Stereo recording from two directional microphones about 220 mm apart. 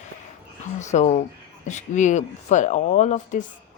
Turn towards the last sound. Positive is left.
turn(degrees=30)  # may be behind; listen again after turning